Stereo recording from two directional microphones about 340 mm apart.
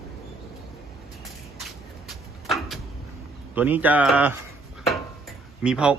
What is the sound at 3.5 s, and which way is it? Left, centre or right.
Speech, centre.